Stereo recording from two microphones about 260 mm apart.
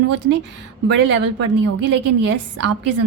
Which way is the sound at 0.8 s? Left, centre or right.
Right.